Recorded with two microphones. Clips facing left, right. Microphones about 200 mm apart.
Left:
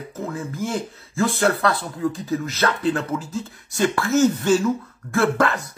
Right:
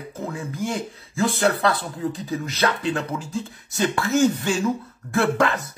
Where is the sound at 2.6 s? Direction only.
15° right (ahead or behind).